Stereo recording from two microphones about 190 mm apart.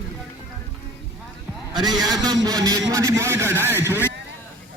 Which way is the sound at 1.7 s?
20° right (ahead or behind).